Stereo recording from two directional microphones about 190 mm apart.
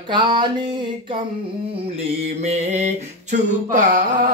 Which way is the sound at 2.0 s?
35° right (ahead or behind).